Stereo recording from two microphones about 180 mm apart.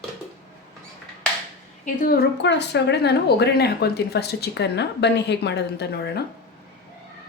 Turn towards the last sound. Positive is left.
turn(degrees=65)  # may be behind; listen again after turning